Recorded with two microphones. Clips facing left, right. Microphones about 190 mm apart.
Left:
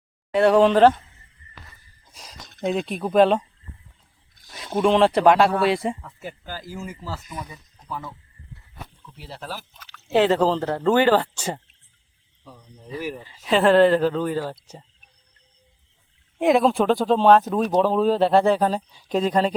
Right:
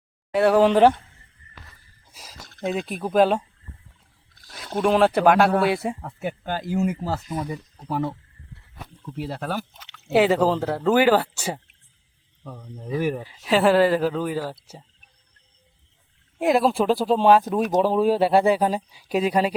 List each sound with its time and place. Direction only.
0.3 s speech: 5° right (ahead or behind)
2.6 s speech: 5° right (ahead or behind)
4.4 s speech: centre (ahead or behind)
6.1 s speech: 65° right (ahead or behind)
9.1 s speech: 55° right (ahead or behind)
9.7 s liquid: 20° right (ahead or behind)
10.1 s speech: 10° right (ahead or behind)
12.4 s speech: 55° right (ahead or behind)
13.2 s speech: 5° right (ahead or behind)
16.4 s speech: centre (ahead or behind)